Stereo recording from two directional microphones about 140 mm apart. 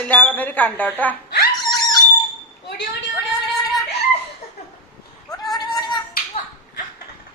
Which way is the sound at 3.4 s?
Centre (ahead or behind).